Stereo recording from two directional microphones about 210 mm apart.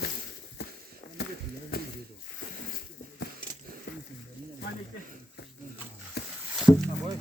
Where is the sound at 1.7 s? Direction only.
45° left (ahead or behind).